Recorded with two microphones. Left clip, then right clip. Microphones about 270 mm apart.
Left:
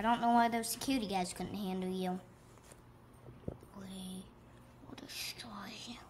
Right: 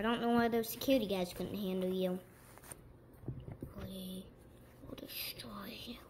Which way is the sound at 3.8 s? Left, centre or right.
Centre.